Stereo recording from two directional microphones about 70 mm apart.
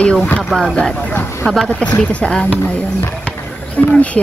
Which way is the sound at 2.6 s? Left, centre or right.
Left.